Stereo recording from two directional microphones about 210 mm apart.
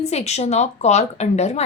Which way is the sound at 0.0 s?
30° left (ahead or behind).